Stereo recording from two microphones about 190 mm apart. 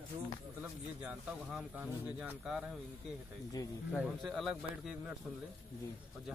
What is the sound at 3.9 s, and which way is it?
Speech, centre (ahead or behind).